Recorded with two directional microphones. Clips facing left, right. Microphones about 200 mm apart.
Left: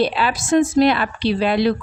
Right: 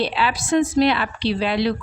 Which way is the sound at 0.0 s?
45° left (ahead or behind).